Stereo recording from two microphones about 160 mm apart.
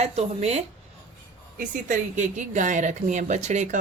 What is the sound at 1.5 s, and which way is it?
Speech, 55° right (ahead or behind).